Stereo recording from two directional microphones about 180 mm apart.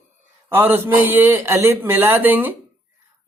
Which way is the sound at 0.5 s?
15° right (ahead or behind).